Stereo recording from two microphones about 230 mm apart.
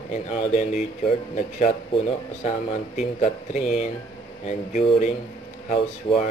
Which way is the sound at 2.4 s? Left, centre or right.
Left.